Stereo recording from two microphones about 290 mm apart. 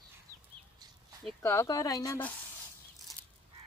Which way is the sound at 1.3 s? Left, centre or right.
Centre.